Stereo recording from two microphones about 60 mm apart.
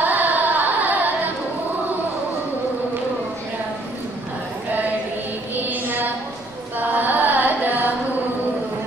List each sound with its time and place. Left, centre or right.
0.0 s carnatic music: right
5.5 s music: right
6.8 s carnatic music: right